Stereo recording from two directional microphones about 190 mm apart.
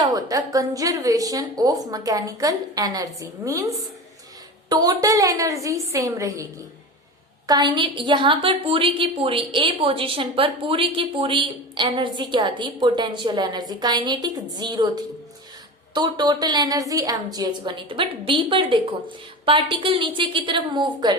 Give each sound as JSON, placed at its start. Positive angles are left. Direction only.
{"t": 0.0, "sound": "a woman's voice", "side_deg": -20}